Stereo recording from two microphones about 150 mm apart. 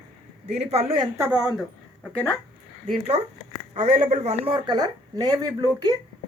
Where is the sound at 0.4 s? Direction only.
45° right (ahead or behind).